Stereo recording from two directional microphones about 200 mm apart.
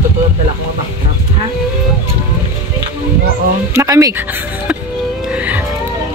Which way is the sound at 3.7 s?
15° right (ahead or behind).